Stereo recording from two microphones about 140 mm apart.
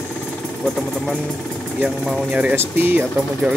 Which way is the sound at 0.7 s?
Centre (ahead or behind).